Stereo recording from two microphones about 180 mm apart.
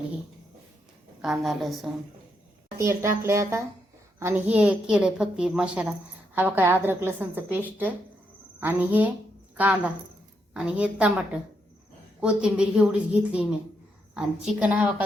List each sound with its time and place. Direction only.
1.2 s speech: centre (ahead or behind)
2.7 s a woman's voice: 15° right (ahead or behind)
8.6 s a woman's voice: 10° right (ahead or behind)
12.2 s a woman's voice: 5° right (ahead or behind)